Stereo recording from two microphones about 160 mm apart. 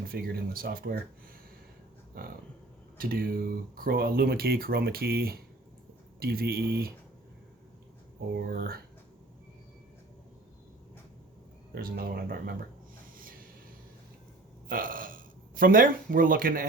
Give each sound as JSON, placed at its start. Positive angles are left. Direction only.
{"t": 0.1, "sound": "speech", "side_deg": -65}
{"t": 3.0, "sound": "speech", "side_deg": -65}
{"t": 8.4, "sound": "speech", "side_deg": -65}
{"t": 11.7, "sound": "speech", "side_deg": -70}
{"t": 14.7, "sound": "speech", "side_deg": -60}